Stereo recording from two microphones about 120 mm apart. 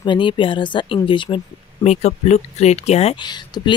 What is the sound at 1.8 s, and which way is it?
Speech, 65° left (ahead or behind).